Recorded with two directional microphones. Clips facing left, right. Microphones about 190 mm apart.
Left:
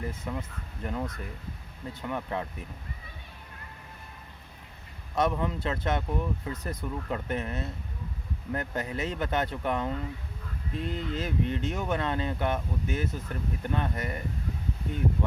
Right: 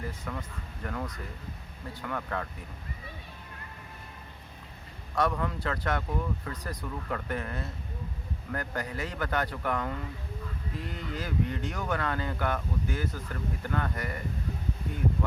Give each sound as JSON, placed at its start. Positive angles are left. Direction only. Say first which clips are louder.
{"t": 0.1, "sound": "speech", "louder": "left 2 dB", "side_deg": 25}
{"t": 5.1, "sound": "speech", "louder": "left 2 dB", "side_deg": 20}